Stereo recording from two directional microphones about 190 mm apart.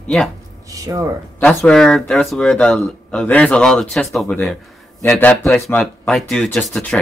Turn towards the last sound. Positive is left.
turn(degrees=5)  # may be behind; listen again after turning